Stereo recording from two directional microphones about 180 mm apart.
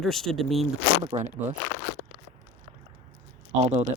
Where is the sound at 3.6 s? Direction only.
30° right (ahead or behind).